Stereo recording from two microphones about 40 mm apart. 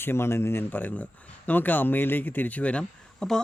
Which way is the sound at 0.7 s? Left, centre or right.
Left.